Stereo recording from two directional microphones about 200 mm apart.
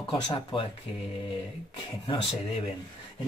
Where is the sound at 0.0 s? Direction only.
25° left (ahead or behind).